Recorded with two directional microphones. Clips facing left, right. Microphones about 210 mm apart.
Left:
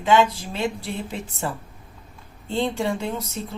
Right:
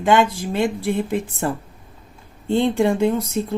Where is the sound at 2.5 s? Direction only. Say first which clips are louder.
Right 7 dB; 55° right (ahead or behind).